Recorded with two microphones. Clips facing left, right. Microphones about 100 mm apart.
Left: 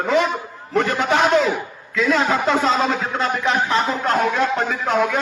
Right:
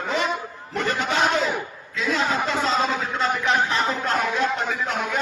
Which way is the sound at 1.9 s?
65° left (ahead or behind).